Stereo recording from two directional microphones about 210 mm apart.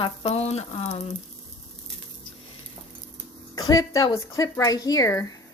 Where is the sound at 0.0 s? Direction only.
25° left (ahead or behind).